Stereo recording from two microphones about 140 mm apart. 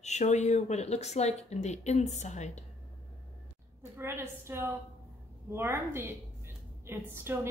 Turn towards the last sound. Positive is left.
turn(degrees=-15)  # may be behind; listen again after turning